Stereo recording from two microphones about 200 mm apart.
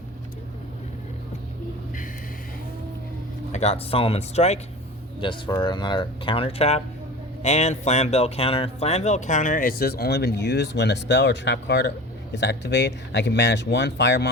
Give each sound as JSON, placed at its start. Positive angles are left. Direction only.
{"t": 3.5, "sound": "speech", "side_deg": 30}